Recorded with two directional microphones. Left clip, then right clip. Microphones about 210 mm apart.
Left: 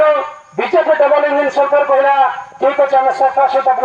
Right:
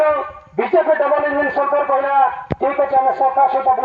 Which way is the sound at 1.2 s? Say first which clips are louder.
Left 4 dB; 10° left (ahead or behind).